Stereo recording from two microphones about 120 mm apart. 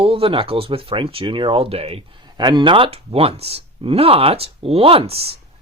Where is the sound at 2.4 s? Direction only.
35° right (ahead or behind).